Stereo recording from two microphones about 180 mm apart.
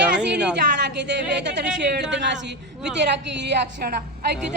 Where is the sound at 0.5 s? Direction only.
70° right (ahead or behind).